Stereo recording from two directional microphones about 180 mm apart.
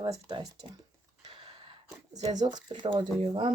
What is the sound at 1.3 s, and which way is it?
Gasp, 30° right (ahead or behind).